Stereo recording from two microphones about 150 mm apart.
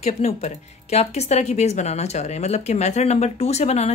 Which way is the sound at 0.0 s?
45° left (ahead or behind).